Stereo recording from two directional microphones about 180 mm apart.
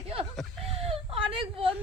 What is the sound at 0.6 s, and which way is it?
Whimper, 35° right (ahead or behind).